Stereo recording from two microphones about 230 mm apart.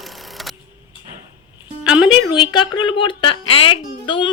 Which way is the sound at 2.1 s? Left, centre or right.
Centre.